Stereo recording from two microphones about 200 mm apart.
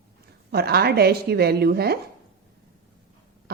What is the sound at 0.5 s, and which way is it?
Speech, 50° right (ahead or behind).